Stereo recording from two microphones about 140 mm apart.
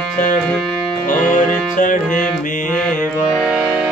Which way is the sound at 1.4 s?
70° left (ahead or behind).